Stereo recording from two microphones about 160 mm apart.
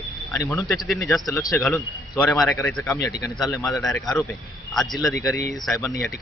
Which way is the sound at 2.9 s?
20° left (ahead or behind).